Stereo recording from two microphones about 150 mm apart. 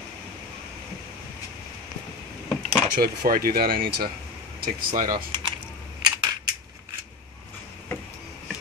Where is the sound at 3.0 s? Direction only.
80° right.